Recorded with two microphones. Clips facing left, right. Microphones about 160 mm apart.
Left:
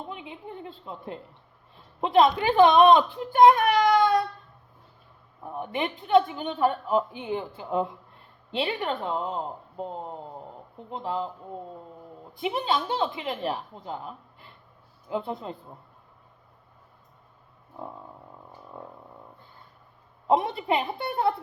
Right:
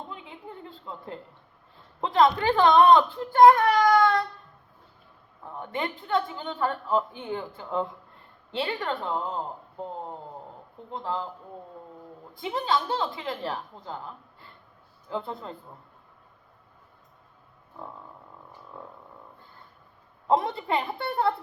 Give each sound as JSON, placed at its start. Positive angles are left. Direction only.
{"t": 0.1, "sound": "a sound", "side_deg": 20}
{"t": 0.9, "sound": "a woman's voice", "side_deg": 20}
{"t": 5.5, "sound": "a woman's voice", "side_deg": 15}
{"t": 10.9, "sound": "a woman's voice", "side_deg": 20}
{"t": 12.4, "sound": "a woman's voice", "side_deg": 20}
{"t": 15.1, "sound": "a woman's voice", "side_deg": 15}
{"t": 20.2, "sound": "a woman's voice", "side_deg": 15}